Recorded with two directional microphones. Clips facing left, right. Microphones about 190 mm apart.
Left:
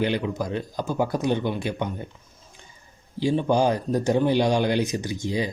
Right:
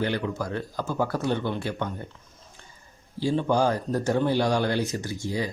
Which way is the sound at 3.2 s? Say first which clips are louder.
Left 2 dB; 15° left (ahead or behind).